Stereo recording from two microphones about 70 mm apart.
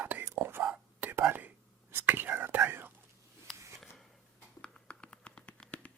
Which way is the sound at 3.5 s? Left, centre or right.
Centre.